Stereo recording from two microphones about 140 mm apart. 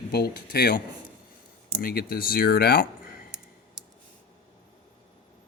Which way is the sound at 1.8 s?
90° left.